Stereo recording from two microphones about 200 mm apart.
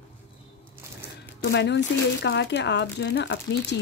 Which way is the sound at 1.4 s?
60° left (ahead or behind).